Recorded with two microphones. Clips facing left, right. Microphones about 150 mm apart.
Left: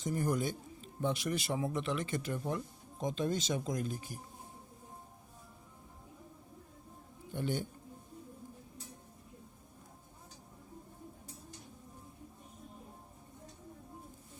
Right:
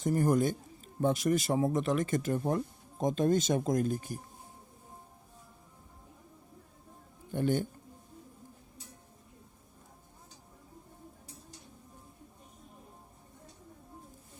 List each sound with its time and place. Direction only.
0.0 s a man's voice: 50° right (ahead or behind)
7.3 s a man's voice: 50° right (ahead or behind)